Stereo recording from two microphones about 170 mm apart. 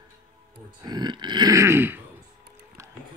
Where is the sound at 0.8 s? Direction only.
25° right (ahead or behind).